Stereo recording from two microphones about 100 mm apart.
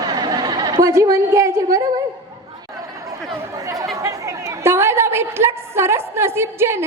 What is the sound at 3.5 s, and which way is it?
Chatter, 35° right (ahead or behind).